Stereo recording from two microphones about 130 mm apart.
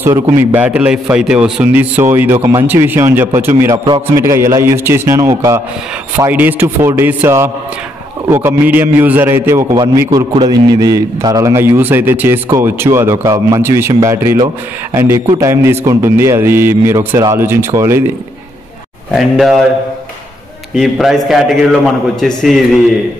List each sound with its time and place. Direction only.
0.0 s a man's voice: 15° right (ahead or behind)
3.7 s a man's voice: 35° right (ahead or behind)
4.2 s a man's voice: 20° right (ahead or behind)
10.3 s a man's voice: 30° right (ahead or behind)
19.1 s a man's voice: centre (ahead or behind)
20.7 s a man's voice: centre (ahead or behind)